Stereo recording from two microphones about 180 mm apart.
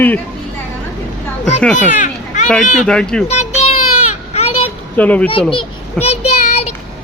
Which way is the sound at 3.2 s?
35° left (ahead or behind).